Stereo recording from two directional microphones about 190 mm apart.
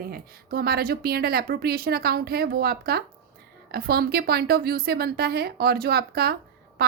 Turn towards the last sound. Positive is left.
turn(degrees=-55)  # may be behind; listen again after turning